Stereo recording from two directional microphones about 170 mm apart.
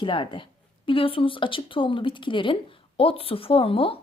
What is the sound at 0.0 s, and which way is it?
A woman's voice, 30° left (ahead or behind).